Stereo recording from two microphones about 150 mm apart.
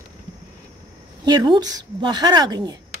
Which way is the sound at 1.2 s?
30° right (ahead or behind).